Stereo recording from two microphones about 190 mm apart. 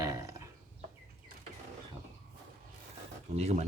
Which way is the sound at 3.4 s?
35° right (ahead or behind).